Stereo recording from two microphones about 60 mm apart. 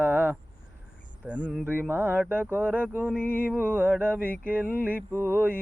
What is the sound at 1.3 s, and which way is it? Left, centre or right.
Mantra, right.